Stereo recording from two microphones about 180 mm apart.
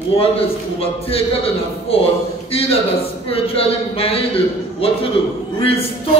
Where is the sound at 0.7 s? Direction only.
30° left (ahead or behind).